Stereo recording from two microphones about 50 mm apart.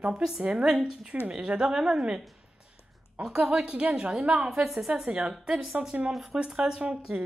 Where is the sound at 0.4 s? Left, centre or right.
Right.